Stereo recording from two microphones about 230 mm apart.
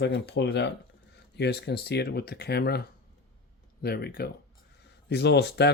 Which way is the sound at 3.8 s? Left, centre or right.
Left.